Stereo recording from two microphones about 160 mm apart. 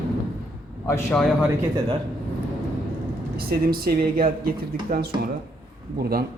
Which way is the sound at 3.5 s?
70° right (ahead or behind).